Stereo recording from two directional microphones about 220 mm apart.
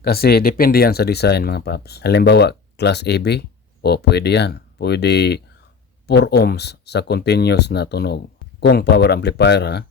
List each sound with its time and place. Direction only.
0.0 s speech: 45° left (ahead or behind)